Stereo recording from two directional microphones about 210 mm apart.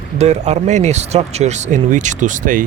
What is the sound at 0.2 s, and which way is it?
Speech, 30° right (ahead or behind).